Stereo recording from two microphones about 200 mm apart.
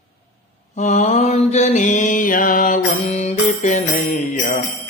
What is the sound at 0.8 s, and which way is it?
Mantra, 35° left (ahead or behind).